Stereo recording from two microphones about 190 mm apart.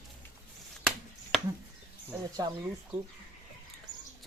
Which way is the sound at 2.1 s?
20° right (ahead or behind).